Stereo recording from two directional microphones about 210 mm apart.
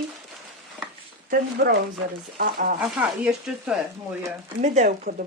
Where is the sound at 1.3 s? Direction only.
50° right (ahead or behind).